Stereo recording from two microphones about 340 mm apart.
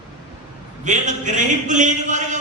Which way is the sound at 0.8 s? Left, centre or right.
Right.